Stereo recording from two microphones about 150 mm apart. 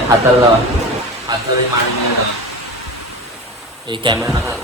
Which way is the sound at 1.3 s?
25° right (ahead or behind).